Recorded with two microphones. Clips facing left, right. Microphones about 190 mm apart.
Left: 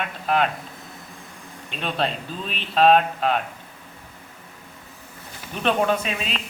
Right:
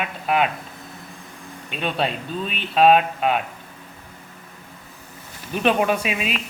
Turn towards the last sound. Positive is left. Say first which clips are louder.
# right 1 dB
turn(degrees=-10)  # may be behind; listen again after turning